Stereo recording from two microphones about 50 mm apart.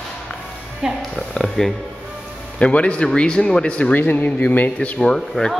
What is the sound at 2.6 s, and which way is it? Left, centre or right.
A man's voice, left.